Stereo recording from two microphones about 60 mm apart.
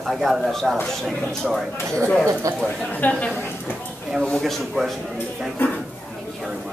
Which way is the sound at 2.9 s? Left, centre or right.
Left.